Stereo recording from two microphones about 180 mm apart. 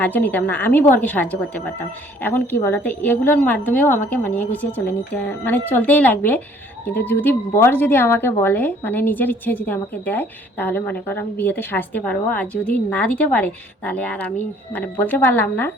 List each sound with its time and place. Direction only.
0.0 s a woman's voice: 10° left (ahead or behind)